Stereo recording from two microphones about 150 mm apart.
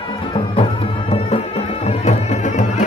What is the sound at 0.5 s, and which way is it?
Music, 40° left (ahead or behind).